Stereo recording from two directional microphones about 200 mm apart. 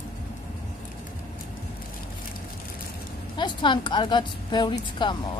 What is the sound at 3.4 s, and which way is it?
Speech, 25° left (ahead or behind).